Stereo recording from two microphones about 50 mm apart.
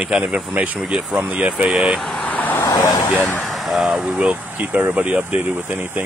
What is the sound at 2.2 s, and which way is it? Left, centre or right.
Vehicle, left.